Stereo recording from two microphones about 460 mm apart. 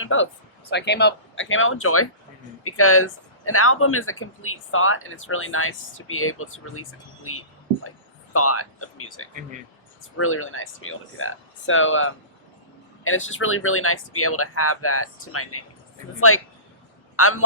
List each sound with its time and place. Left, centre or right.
0.0 s speech: left
7.9 s speech: left
17.2 s speech: left